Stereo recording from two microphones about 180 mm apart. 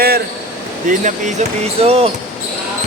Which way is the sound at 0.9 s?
40° right (ahead or behind).